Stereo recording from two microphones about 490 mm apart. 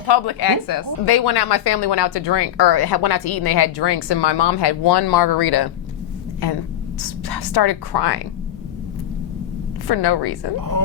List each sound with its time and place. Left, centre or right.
0.1 s a woman's voice: left
7.0 s a woman's voice: left
9.8 s a woman's voice: left